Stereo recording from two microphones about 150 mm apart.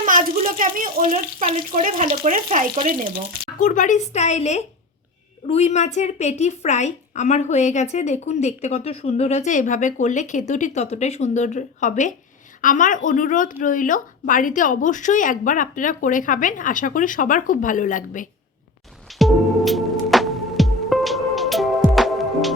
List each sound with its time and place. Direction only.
0.0 s a sound: 65° right (ahead or behind)
1.7 s speech: 55° right (ahead or behind)
3.6 s a woman's voice: 55° left (ahead or behind)
19.2 s music: centre (ahead or behind)